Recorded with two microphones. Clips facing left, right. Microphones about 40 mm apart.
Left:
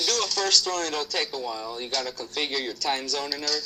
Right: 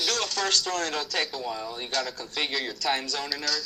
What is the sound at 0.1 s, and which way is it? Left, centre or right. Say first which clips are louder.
Speech: left 3 dB; right.